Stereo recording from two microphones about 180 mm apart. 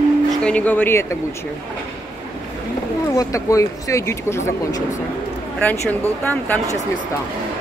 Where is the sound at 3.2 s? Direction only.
20° left (ahead or behind).